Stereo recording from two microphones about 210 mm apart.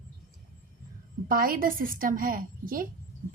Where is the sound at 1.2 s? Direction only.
45° right (ahead or behind).